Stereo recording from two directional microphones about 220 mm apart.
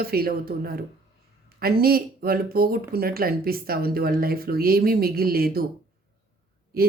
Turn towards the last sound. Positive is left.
turn(degrees=-45)  # may be behind; listen again after turning